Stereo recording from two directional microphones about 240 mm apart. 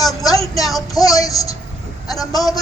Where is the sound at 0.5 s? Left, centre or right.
Centre.